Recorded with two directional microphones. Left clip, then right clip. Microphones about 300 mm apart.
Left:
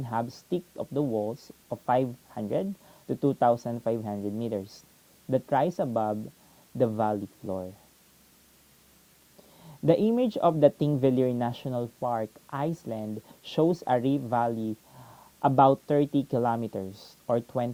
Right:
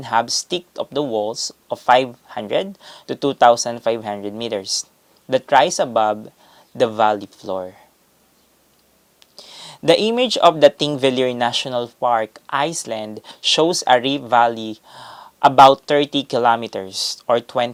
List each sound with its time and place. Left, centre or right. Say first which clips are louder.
0.0 s speech: right 14 dB; centre
1.0 s speech: right 8 dB; right
2.3 s speech: right 11 dB; centre
7.2 s speech: right 9 dB; centre
9.6 s speech: right 9 dB; centre
14.5 s speech: right 6 dB; right
14.9 s a sound: right 14 dB; centre
15.9 s speech: right 8 dB; centre